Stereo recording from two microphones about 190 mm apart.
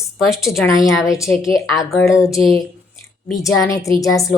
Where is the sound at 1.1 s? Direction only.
15° left (ahead or behind).